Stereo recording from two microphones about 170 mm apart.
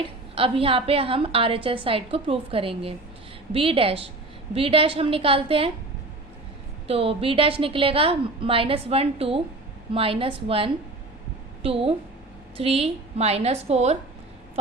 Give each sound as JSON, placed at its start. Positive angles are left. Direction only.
{"t": 0.3, "sound": "a woman's voice", "side_deg": -35}
{"t": 6.8, "sound": "a woman's voice", "side_deg": -35}